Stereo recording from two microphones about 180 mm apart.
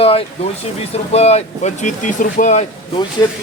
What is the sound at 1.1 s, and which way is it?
Speech, 35° left (ahead or behind).